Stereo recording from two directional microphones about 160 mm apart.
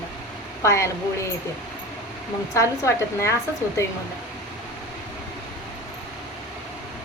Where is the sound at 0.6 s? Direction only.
15° left (ahead or behind).